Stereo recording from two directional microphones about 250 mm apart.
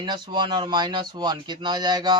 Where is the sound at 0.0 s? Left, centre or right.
Centre.